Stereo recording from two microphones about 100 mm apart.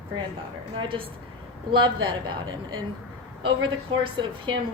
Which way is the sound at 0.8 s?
60° right (ahead or behind).